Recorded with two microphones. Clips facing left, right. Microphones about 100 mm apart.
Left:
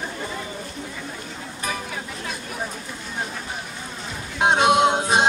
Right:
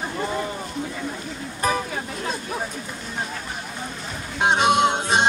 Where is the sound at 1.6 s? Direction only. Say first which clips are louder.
Right 7 dB; 40° right (ahead or behind).